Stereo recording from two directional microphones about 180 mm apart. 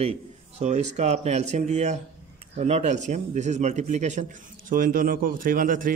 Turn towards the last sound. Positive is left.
turn(degrees=-50)  # may be behind; listen again after turning